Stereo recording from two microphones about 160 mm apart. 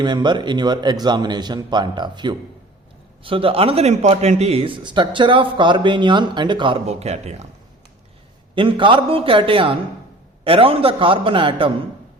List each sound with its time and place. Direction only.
0.0 s a man's voice: 30° right (ahead or behind); by 7.4 s 45° right (ahead or behind)
8.5 s a man's voice: 30° right (ahead or behind)